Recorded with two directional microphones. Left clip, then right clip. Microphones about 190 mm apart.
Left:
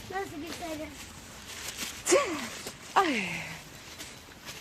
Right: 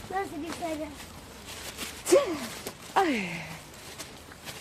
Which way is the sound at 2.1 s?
15° left (ahead or behind).